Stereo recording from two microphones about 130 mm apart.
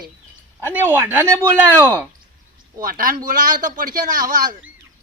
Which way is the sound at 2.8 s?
90° right.